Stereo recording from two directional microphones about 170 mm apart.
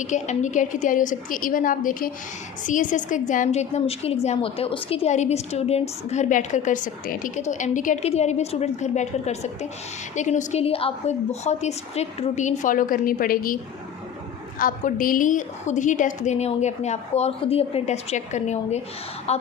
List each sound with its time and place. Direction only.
0.0 s a woman's voice: 45° left (ahead or behind)
14.6 s a woman's voice: 55° left (ahead or behind)